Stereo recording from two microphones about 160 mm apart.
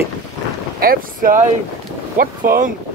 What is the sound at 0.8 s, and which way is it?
Speech, 65° right (ahead or behind).